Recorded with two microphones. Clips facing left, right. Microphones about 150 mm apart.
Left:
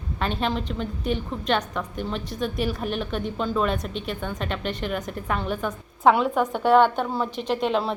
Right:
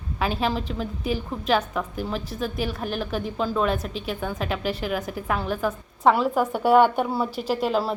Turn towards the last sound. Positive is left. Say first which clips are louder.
# even
turn(degrees=-5)  # may be behind; listen again after turning